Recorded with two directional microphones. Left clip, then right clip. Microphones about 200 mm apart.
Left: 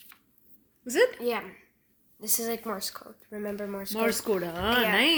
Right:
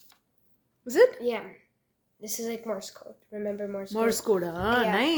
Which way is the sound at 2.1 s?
45° left (ahead or behind).